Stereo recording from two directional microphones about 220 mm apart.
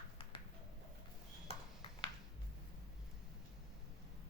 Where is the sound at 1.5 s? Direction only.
25° left (ahead or behind).